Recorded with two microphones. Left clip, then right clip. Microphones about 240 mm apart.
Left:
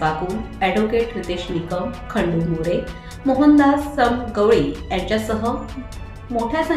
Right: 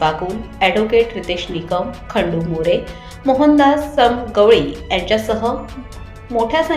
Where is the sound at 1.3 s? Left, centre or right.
Centre.